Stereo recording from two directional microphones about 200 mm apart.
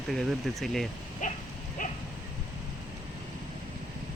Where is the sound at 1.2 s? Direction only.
40° left (ahead or behind).